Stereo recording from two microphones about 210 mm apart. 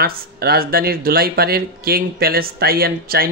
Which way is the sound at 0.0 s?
45° right (ahead or behind).